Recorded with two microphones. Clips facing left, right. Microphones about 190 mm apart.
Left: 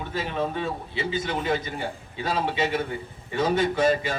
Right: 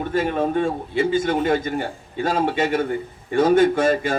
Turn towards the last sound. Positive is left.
turn(degrees=-50)  # may be behind; listen again after turning